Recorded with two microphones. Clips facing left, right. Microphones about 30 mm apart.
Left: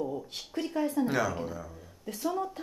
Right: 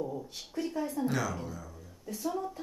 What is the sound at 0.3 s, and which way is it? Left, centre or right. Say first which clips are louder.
Speech: left 2 dB; left.